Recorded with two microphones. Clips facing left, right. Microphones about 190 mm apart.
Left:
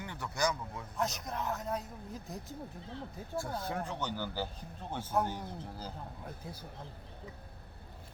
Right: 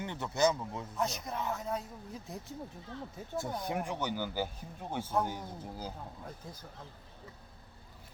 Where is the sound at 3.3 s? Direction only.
20° right (ahead or behind).